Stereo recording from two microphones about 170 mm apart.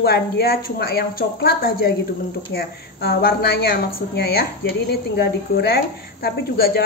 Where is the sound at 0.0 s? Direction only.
70° left (ahead or behind).